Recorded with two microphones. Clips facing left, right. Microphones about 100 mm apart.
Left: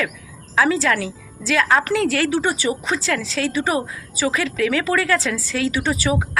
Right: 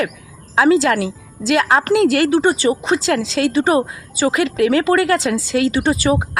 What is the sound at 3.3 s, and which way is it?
Speech, 55° right (ahead or behind).